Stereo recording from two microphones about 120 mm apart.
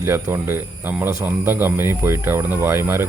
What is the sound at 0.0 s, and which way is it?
Speech, 20° right (ahead or behind).